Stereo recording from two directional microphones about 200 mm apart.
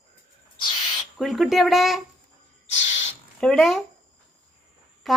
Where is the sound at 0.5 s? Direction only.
25° left (ahead or behind).